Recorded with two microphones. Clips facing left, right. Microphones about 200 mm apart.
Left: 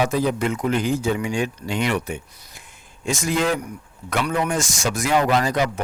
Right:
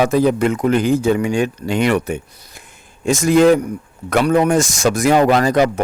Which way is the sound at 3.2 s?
65° right (ahead or behind).